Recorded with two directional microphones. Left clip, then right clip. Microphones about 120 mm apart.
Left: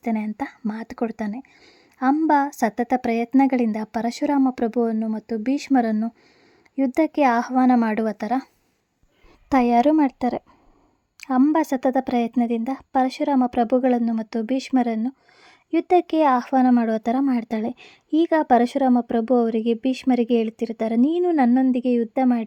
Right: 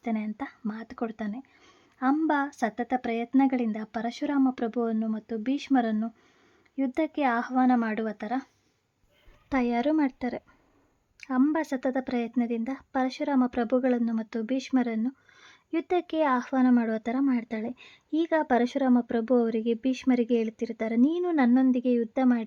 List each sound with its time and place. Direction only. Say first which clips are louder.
0.0 s speech: left 6 dB; 40° left (ahead or behind)
9.5 s a woman's voice: left 9 dB; 50° left (ahead or behind); by 22.4 s 20° left (ahead or behind)